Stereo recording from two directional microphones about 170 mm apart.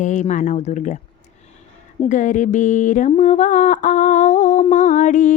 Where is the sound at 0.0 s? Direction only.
45° left (ahead or behind).